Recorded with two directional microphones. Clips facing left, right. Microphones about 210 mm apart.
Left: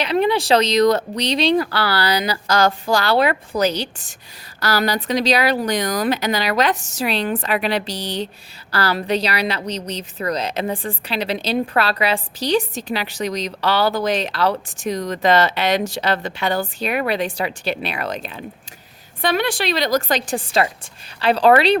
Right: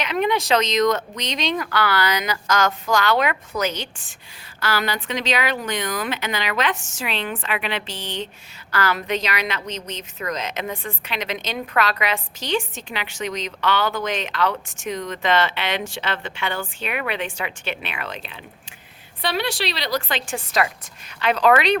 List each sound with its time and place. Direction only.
0.0 s a woman's voice: 35° left (ahead or behind)